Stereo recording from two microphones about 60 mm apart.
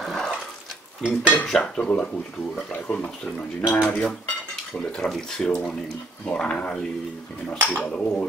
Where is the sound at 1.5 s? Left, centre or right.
Centre.